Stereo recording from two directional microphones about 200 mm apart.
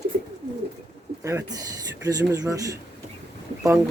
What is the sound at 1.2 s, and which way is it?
Speech, 15° right (ahead or behind).